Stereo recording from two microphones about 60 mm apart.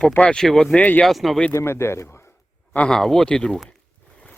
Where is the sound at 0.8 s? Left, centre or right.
Left.